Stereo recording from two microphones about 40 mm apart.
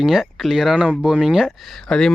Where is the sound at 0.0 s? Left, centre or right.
Centre.